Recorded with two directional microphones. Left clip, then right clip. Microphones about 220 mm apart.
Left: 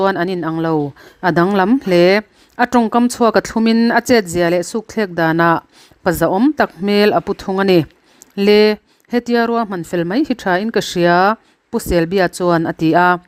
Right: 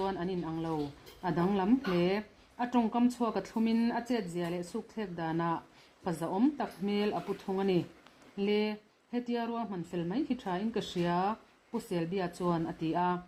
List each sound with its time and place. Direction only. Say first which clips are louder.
0.0 s a woman's voice: left 19 dB; 50° left (ahead or behind)